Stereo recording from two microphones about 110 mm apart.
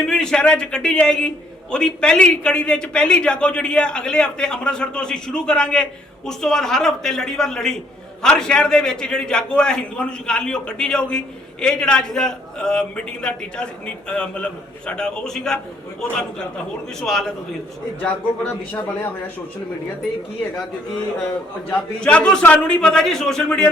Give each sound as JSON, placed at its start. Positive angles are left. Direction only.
{"t": 0.0, "sound": "a man's voice", "side_deg": 5}
{"t": 18.0, "sound": "a man's voice", "side_deg": 15}
{"t": 21.7, "sound": "a man's voice", "side_deg": 10}